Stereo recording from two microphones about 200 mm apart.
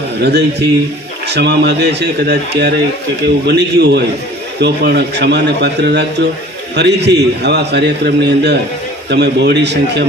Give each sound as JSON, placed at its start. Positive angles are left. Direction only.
{"t": 0.2, "sound": "a man's voice", "side_deg": -55}